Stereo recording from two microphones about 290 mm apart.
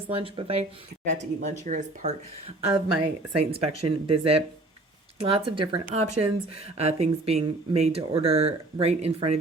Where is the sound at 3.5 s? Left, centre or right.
Centre.